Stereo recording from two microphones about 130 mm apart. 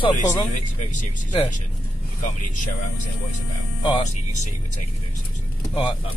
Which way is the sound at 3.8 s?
35° left (ahead or behind).